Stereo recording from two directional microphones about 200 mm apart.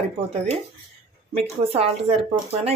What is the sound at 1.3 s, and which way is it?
Speech, 30° right (ahead or behind).